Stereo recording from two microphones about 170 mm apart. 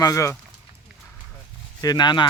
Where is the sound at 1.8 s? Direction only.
25° left (ahead or behind).